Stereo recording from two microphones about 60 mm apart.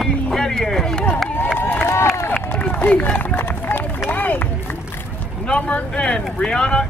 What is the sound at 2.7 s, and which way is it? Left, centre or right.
Run, left.